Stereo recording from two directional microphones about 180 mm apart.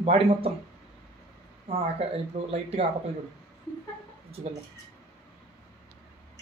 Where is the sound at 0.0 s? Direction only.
35° right (ahead or behind).